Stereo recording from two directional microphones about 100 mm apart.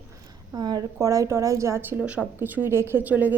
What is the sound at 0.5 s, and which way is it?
Speech, 45° right (ahead or behind).